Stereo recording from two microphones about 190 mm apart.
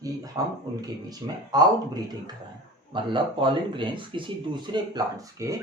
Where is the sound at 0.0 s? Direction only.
20° right (ahead or behind).